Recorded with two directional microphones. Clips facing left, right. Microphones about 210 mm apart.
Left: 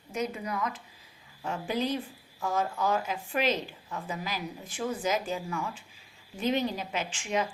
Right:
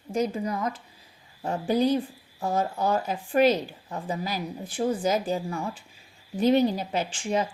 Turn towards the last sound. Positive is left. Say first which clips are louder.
# right 4 dB
turn(degrees=-35)  # may be behind; listen again after turning